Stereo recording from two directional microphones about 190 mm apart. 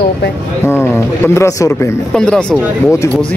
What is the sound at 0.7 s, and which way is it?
Speech, 10° left (ahead or behind).